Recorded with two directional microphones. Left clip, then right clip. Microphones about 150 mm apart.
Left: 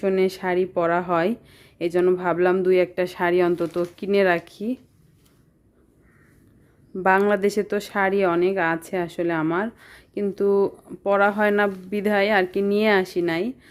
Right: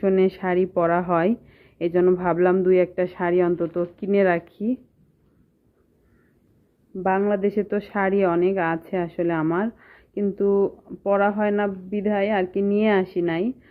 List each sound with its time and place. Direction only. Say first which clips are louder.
0.0 s speech: right 1 dB; 15° left (ahead or behind)
6.9 s speech: left 3 dB; 35° left (ahead or behind); by 13.7 s 20° left (ahead or behind)